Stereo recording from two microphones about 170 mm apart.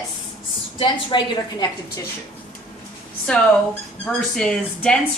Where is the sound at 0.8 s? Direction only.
25° left (ahead or behind).